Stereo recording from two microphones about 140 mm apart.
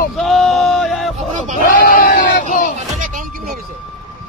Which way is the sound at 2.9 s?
65° right (ahead or behind).